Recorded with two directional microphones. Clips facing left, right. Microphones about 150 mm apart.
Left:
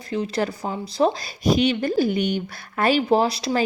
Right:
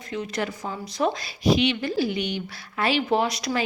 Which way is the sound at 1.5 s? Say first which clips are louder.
Left 2 dB; 45° left (ahead or behind).